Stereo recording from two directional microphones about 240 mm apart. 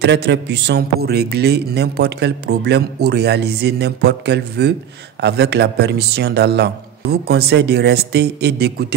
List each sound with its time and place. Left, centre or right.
0.0 s a man's voice: right